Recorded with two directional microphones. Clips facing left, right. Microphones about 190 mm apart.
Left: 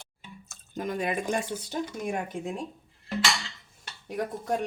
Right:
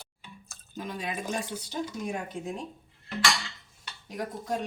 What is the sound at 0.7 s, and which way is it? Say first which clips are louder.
Speech: left 6 dB; 50° left (ahead or behind).